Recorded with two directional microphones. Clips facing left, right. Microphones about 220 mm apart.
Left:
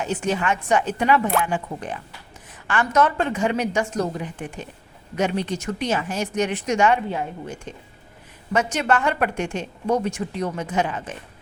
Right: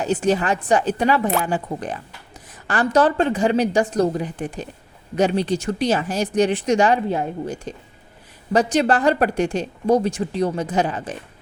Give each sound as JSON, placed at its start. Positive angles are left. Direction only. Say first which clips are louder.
{"t": 0.0, "sound": "a woman's voice", "louder": "right 4 dB", "side_deg": -35}